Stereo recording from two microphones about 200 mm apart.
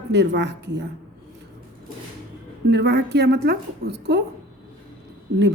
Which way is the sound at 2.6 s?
55° right (ahead or behind).